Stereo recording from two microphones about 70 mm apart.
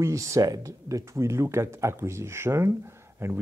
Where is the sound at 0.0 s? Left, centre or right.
Right.